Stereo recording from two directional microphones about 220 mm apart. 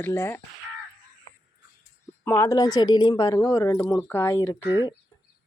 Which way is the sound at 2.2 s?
10° left (ahead or behind).